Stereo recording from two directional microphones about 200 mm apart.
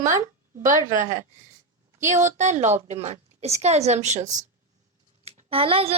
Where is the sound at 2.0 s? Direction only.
35° right (ahead or behind).